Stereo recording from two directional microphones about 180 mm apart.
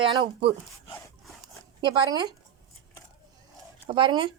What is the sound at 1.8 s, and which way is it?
Speech, 25° right (ahead or behind).